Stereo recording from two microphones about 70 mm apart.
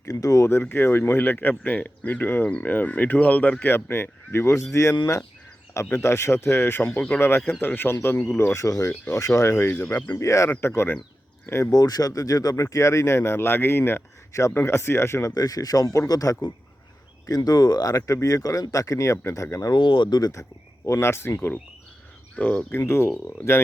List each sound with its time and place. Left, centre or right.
0.1 s speech: left
0.4 s speech: left
8.6 s speech: left
10.6 s speech: left
11.7 s speech: left
12.6 s speech: left
15.2 s speech: left
19.7 s speech: left
20.8 s speech: left
22.4 s speech: left
22.8 s speech: left